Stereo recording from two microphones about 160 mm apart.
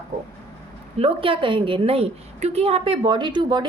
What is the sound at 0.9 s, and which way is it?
A woman's voice, 35° right (ahead or behind).